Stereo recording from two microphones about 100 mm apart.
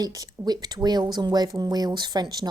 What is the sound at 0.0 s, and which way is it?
A woman's voice, 35° right (ahead or behind).